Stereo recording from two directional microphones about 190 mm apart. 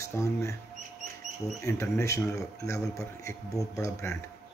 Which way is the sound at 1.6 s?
15° left (ahead or behind).